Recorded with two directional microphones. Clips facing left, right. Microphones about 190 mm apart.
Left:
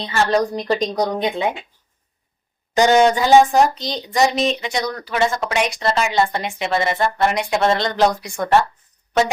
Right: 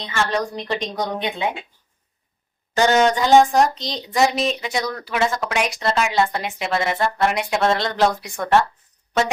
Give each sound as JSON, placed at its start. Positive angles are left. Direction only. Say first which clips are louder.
{"t": 0.0, "sound": "a woman's voice", "louder": "left 5 dB", "side_deg": 35}
{"t": 2.7, "sound": "speech", "louder": "left 3 dB", "side_deg": 15}